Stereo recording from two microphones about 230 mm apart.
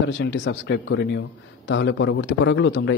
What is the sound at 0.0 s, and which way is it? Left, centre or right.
A man's voice, left.